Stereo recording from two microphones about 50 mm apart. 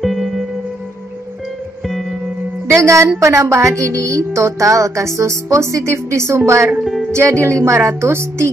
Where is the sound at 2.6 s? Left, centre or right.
Right.